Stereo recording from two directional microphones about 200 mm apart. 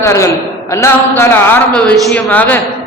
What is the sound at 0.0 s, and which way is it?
A man's voice, 15° left (ahead or behind).